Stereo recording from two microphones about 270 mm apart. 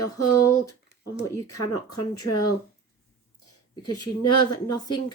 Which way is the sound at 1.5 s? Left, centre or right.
Left.